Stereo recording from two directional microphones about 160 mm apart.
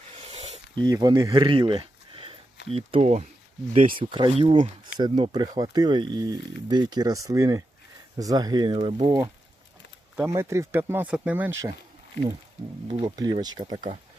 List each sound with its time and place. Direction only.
0.2 s a sound: 40° right (ahead or behind)
0.8 s speech: 25° right (ahead or behind)
10.2 s speech: 15° right (ahead or behind)
12.9 s speech: 25° right (ahead or behind)